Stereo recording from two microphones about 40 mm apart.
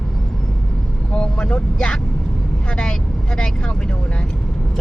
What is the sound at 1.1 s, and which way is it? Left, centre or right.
Speech, left.